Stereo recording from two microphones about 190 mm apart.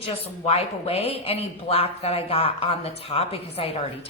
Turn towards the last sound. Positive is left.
turn(degrees=30)  # may be behind; listen again after turning